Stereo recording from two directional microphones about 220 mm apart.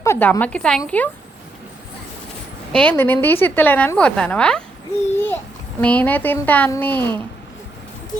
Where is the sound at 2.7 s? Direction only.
5° left (ahead or behind).